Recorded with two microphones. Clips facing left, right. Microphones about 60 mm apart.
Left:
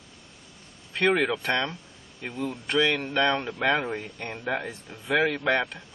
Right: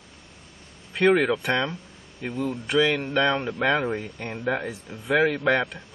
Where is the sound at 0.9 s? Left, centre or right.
Centre.